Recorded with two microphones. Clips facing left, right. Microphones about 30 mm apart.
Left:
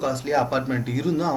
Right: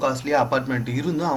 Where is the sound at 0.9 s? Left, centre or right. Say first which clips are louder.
Left 1 dB; centre.